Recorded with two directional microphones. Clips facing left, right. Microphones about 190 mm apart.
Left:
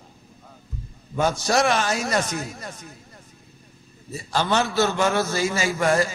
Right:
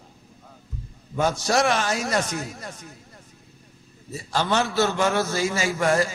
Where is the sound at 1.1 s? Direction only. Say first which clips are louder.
Left 1 dB; 30° left (ahead or behind).